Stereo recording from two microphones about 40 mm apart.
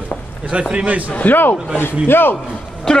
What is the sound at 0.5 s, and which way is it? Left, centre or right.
Speech, right.